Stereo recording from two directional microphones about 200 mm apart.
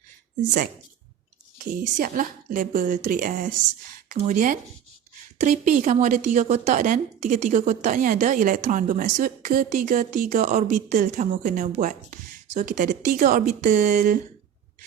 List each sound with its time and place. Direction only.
1.5 s a woman's voice: 40° right (ahead or behind)